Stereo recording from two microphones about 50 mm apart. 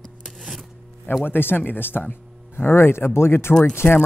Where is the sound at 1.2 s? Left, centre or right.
Left.